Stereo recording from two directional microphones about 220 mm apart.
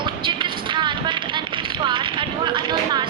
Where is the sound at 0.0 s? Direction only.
20° right (ahead or behind).